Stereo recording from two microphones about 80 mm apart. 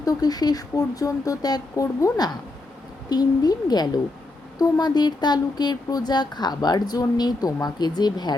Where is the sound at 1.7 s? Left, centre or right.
Left.